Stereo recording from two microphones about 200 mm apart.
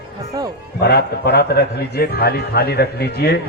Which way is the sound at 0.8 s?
55° left (ahead or behind).